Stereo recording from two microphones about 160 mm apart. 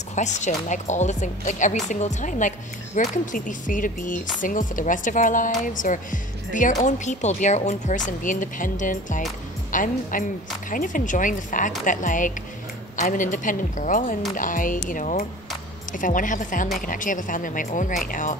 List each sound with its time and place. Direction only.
0.1 s a woman's voice: 50° left (ahead or behind)